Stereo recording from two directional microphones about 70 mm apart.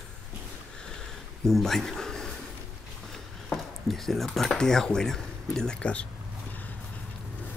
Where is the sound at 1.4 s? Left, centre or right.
Centre.